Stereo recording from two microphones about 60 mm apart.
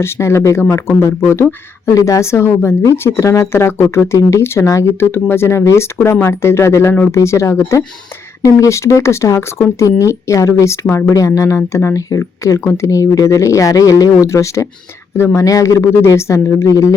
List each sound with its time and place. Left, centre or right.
0.0 s speech: left
1.9 s speech: left
11.9 s speech: left
12.5 s speech: left
15.8 s speech: left